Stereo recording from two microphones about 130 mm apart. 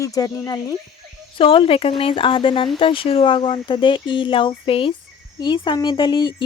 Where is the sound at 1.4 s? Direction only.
40° left (ahead or behind).